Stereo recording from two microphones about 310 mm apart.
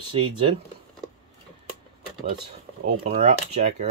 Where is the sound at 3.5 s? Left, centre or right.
Right.